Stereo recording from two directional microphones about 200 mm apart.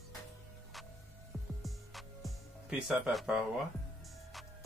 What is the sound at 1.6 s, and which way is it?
Music, centre (ahead or behind).